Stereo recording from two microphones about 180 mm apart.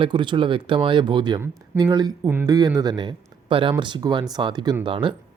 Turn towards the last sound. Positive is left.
turn(degrees=-30)  # may be behind; listen again after turning